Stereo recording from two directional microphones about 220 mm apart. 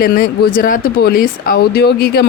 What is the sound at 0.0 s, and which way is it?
Speech, 40° left (ahead or behind).